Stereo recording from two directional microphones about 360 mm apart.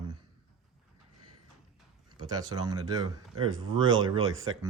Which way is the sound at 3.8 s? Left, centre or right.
Right.